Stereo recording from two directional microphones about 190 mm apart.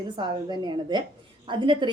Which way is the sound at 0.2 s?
25° right (ahead or behind).